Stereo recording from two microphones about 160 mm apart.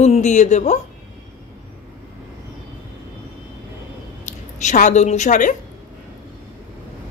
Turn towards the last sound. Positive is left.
turn(degrees=50)  # may be behind; listen again after turning